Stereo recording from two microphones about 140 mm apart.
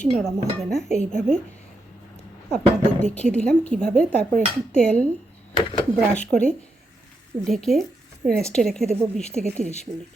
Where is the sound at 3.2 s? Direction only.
10° left (ahead or behind).